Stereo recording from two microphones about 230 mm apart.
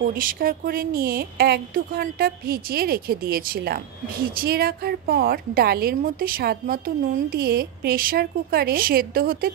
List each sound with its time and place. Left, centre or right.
0.0 s speech: right